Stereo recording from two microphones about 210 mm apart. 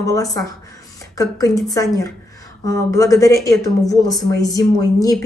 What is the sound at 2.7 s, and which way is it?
A woman's voice, 15° left (ahead or behind).